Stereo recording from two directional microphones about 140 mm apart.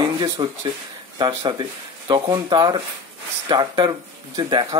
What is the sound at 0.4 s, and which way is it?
Speech, 35° right (ahead or behind).